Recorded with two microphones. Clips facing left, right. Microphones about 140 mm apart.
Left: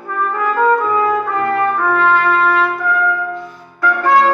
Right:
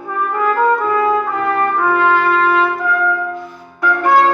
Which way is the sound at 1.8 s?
10° right (ahead or behind).